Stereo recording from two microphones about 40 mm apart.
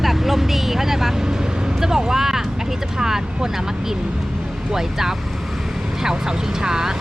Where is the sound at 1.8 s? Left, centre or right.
Centre.